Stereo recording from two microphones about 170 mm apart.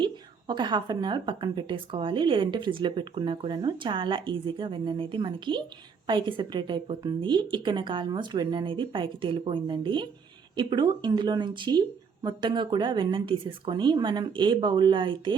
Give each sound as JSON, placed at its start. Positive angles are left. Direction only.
{"t": 0.0, "sound": "a woman's voice", "side_deg": -25}